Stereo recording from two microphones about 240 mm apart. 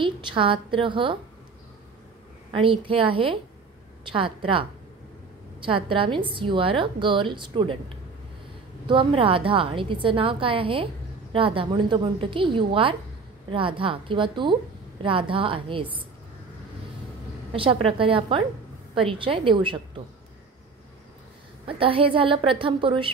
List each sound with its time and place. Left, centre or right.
0.0 s a woman's voice: right
2.5 s a woman's voice: right
8.8 s a woman's voice: right
17.5 s a woman's voice: right
21.6 s a woman's voice: right